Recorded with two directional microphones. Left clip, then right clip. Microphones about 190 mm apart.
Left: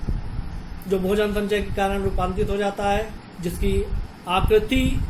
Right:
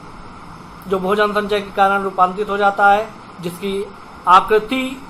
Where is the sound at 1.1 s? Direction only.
15° left (ahead or behind).